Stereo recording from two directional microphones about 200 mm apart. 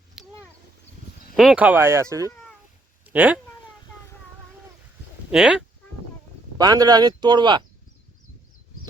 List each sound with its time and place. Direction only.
0.2 s a sound: 5° right (ahead or behind)
1.4 s speech: 5° right (ahead or behind)
5.3 s speech: 5° right (ahead or behind)
6.6 s speech: 20° right (ahead or behind)